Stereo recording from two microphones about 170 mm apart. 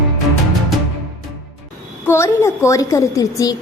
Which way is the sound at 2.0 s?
15° left (ahead or behind).